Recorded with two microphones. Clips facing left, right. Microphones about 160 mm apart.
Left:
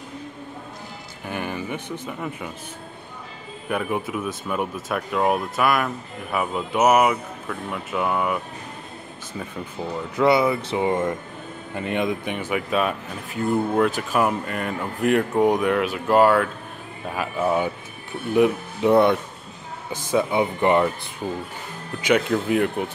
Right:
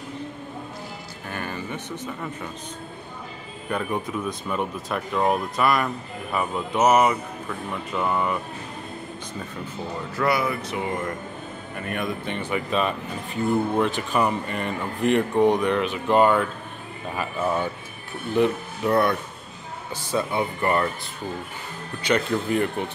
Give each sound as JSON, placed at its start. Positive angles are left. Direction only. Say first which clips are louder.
{"t": 1.2, "sound": "speech", "louder": "left 4 dB", "side_deg": 15}
{"t": 3.6, "sound": "speech", "louder": "left 2 dB", "side_deg": 5}
{"t": 10.1, "sound": "speech", "louder": "left 5 dB", "side_deg": 25}
{"t": 22.0, "sound": "speech", "louder": "left 3 dB", "side_deg": 5}